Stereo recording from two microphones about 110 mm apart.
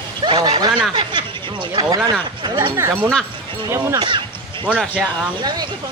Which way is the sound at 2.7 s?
25° right (ahead or behind).